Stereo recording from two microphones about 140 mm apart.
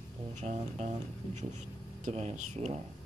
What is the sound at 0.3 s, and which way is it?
Speech, 55° right (ahead or behind).